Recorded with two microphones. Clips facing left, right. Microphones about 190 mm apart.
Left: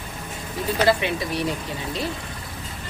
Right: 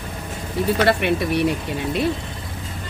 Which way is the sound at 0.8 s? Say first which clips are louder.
Right 3 dB; 60° right (ahead or behind).